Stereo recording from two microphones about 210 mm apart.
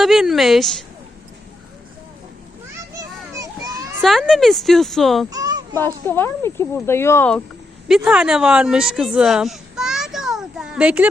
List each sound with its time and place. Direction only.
0.0 s speech: centre (ahead or behind)
4.0 s speech: centre (ahead or behind)
5.3 s a sound: 15° right (ahead or behind)
5.7 s speech: 10° left (ahead or behind)
7.9 s speech: 5° right (ahead or behind)